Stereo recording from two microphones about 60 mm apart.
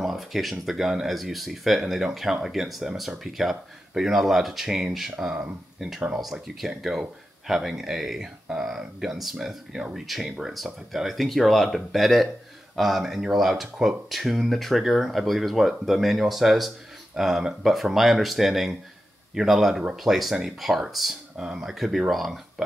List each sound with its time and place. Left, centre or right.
0.0 s speech: centre